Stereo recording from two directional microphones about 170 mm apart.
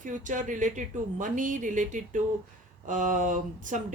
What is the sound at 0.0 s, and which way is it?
Speech, 50° right (ahead or behind).